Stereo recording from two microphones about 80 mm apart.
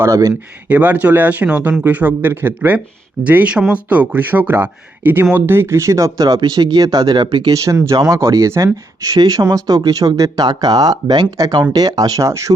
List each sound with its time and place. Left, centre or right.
0.0 s speech: right
0.7 s speech: right
6.1 s speech: right
7.3 s speech: right
7.5 s speech: right
9.0 s speech: right